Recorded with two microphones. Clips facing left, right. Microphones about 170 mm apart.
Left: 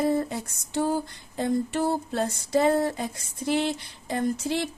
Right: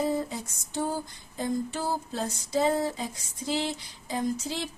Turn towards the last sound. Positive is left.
turn(degrees=65)  # may be behind; listen again after turning